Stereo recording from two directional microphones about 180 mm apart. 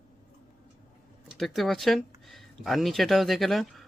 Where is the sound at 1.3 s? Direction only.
Centre (ahead or behind).